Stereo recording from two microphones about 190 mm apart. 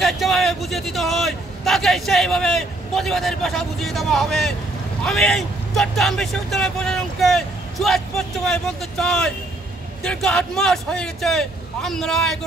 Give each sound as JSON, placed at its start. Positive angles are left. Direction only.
{"t": 0.0, "sound": "a man's voice", "side_deg": 0}